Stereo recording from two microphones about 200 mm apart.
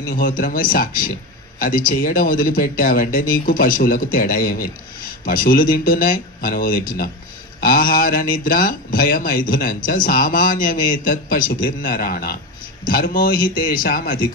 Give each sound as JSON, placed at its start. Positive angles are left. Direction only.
{"t": 0.0, "sound": "speech", "side_deg": 45}